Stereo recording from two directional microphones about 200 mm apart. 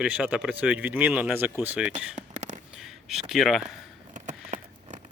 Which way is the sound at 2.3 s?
35° right (ahead or behind).